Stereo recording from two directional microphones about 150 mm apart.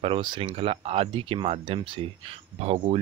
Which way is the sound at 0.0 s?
35° right (ahead or behind).